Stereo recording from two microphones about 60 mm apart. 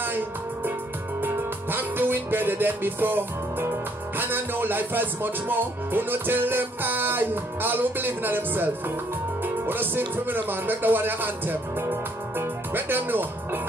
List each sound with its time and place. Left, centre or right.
1.2 s music: right
11.9 s speech: right